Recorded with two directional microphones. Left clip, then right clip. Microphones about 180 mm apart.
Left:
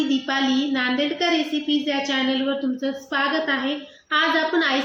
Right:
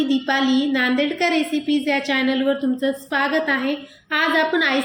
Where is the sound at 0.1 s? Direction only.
35° right (ahead or behind).